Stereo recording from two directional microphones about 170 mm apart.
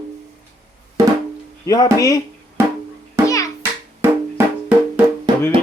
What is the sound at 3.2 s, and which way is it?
Music, 20° left (ahead or behind).